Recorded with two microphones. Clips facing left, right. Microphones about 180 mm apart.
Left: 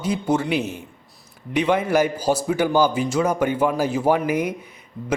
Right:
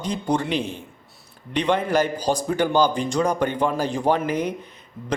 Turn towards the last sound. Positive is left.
turn(degrees=10)  # may be behind; listen again after turning